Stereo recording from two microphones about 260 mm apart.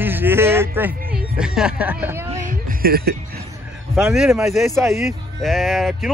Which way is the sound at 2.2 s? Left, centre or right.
Right.